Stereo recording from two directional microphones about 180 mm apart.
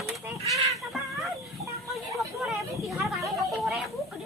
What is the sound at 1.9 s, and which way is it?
Hubbub, centre (ahead or behind).